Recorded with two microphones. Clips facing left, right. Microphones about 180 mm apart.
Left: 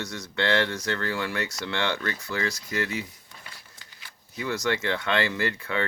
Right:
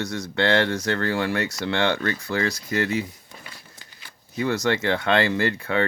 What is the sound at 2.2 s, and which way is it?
Speech, 60° right (ahead or behind).